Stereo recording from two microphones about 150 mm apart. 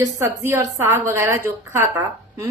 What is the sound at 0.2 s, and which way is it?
A woman's voice, 20° right (ahead or behind).